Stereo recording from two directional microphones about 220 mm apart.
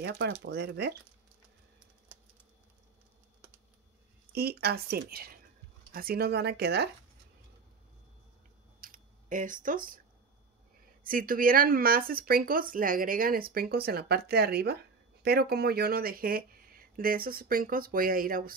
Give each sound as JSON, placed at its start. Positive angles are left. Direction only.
{"t": 0.0, "sound": "speech", "side_deg": -50}
{"t": 4.3, "sound": "speech", "side_deg": -45}
{"t": 8.8, "sound": "camera", "side_deg": -40}
{"t": 11.1, "sound": "speech", "side_deg": -40}